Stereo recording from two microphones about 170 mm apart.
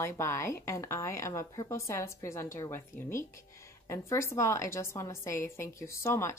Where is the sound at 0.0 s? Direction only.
15° left (ahead or behind).